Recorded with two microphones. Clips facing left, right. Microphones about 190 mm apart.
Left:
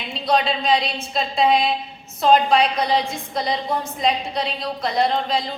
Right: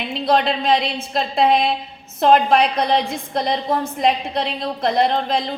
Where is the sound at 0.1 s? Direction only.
60° right (ahead or behind).